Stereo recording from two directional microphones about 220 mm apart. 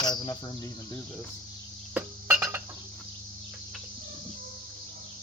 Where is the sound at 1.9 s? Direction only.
5° right (ahead or behind).